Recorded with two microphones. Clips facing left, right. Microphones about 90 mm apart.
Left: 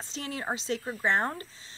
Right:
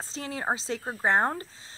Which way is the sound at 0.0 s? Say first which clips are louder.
Right 3 dB; 30° right (ahead or behind).